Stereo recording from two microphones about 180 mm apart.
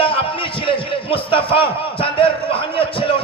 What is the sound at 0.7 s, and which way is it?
A man's voice, 30° left (ahead or behind).